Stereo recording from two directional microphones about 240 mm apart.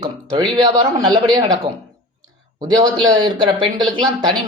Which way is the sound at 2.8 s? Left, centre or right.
Centre.